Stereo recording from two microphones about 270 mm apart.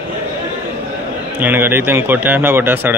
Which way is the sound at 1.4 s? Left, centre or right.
Centre.